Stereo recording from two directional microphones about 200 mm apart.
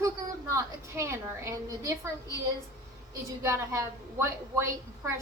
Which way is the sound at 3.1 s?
15° right (ahead or behind).